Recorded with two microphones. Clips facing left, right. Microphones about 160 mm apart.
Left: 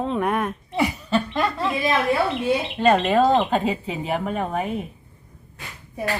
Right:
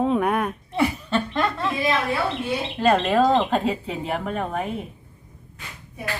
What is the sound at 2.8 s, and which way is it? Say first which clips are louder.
Speech: even; centre (ahead or behind).